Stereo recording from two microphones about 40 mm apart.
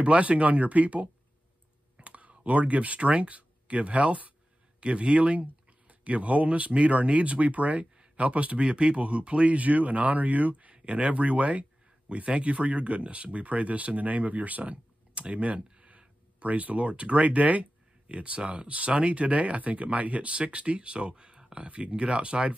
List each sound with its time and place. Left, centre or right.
0.0 s speech: right